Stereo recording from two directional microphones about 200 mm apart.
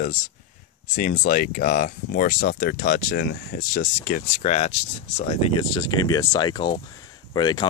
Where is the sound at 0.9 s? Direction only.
35° left (ahead or behind).